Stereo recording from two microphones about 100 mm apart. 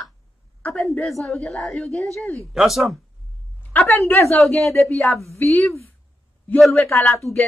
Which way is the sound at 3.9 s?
25° left (ahead or behind).